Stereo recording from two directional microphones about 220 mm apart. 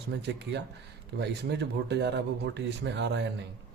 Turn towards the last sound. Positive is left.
turn(degrees=-55)  # may be behind; listen again after turning